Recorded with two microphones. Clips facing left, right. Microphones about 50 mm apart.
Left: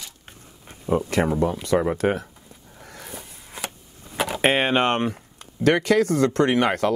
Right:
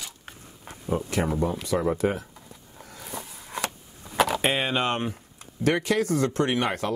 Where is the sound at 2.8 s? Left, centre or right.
Left.